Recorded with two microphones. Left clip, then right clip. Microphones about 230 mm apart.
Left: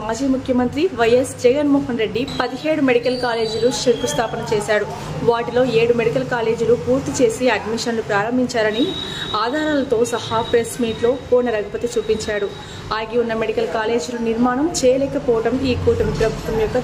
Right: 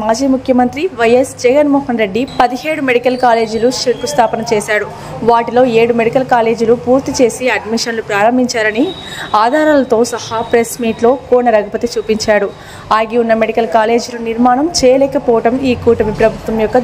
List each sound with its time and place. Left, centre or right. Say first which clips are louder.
0.5 s a woman's voice: right 5 dB; right